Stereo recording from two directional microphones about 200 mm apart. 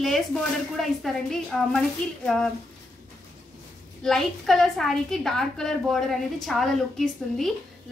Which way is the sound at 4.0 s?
Centre (ahead or behind).